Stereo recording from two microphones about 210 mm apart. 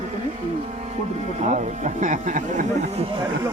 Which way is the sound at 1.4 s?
35° right (ahead or behind).